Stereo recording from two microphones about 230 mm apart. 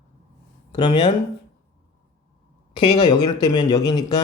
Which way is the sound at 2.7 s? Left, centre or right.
Left.